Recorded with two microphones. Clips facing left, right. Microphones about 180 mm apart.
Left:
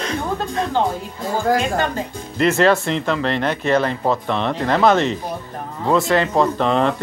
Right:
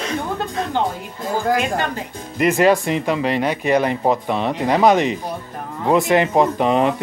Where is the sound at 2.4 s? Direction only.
10° right (ahead or behind).